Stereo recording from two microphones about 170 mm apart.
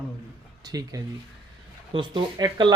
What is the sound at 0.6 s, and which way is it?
Speech, 20° right (ahead or behind).